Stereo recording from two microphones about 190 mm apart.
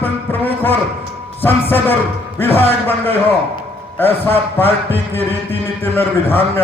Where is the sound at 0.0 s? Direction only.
10° left (ahead or behind).